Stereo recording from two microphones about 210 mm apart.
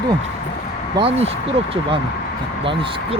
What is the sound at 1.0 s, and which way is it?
Speech, 30° right (ahead or behind).